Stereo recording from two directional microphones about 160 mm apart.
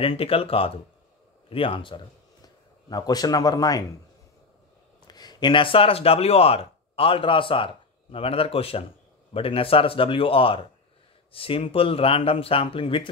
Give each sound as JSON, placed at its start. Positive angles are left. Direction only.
{"t": 0.0, "sound": "speech", "side_deg": 35}
{"t": 5.0, "sound": "speech", "side_deg": 25}